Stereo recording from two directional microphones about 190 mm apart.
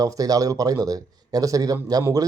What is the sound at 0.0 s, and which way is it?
Speech, 20° right (ahead or behind).